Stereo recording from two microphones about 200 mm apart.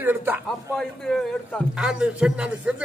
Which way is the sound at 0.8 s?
5° left (ahead or behind).